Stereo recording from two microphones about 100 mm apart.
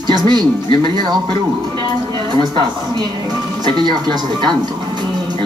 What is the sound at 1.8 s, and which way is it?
A woman's voice, 50° right (ahead or behind).